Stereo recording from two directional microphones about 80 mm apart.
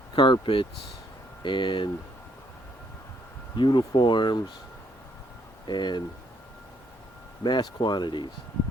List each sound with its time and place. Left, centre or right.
0.2 s speech: left
3.6 s speech: left
5.6 s speech: left
7.4 s speech: left